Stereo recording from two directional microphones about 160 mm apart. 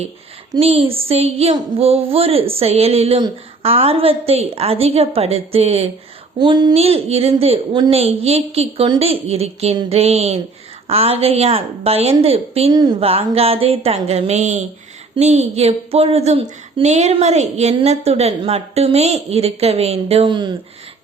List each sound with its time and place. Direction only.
0.6 s speech: 40° right (ahead or behind)
6.4 s speech: 25° right (ahead or behind)
6.7 s speech: 40° right (ahead or behind)
12.7 s speech: 25° right (ahead or behind)
13.0 s speech: 40° right (ahead or behind)